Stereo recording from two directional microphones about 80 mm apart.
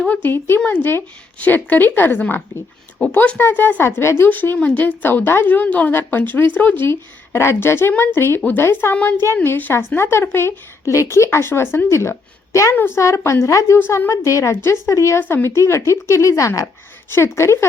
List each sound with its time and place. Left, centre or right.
0.1 s a woman's voice: left
3.2 s a woman's voice: left
12.7 s a woman's voice: left
13.0 s a woman's voice: left
15.2 s a woman's voice: left